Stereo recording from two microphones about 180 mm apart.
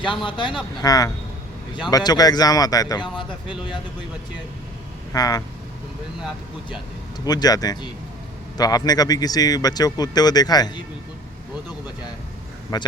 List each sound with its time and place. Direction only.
0.0 s speech: 25° left (ahead or behind)
5.1 s speech: 20° left (ahead or behind)
7.3 s speech: 20° left (ahead or behind)
12.7 s speech: 25° left (ahead or behind)